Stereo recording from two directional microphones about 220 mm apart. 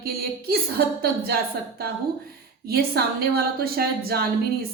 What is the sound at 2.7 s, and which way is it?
A woman's voice, 45° right (ahead or behind).